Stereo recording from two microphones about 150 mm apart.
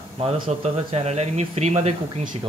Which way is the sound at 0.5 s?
45° right (ahead or behind).